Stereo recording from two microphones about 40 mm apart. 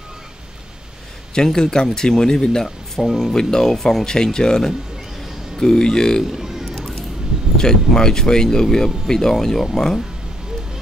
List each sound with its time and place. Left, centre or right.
1.3 s speech: centre
6.3 s music: centre
7.5 s speech: centre